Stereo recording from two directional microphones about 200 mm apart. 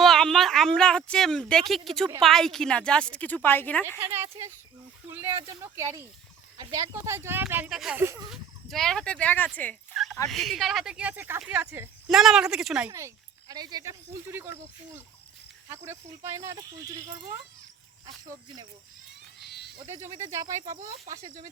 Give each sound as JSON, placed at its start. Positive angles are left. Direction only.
{"t": 0.0, "sound": "speech", "side_deg": 0}
{"t": 3.8, "sound": "speech", "side_deg": -10}
{"t": 8.3, "sound": "speech", "side_deg": 0}
{"t": 12.9, "sound": "speech", "side_deg": -15}
{"t": 19.4, "sound": "a sound", "side_deg": 55}
{"t": 19.8, "sound": "speech", "side_deg": -15}
{"t": 20.7, "sound": "speech", "side_deg": -40}